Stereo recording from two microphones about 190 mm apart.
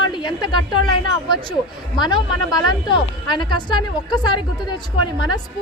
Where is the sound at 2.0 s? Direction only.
20° left (ahead or behind).